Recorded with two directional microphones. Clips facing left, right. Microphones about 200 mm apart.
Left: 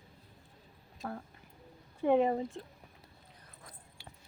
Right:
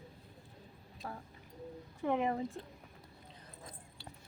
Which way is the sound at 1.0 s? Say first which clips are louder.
Left 5 dB; 50° left (ahead or behind).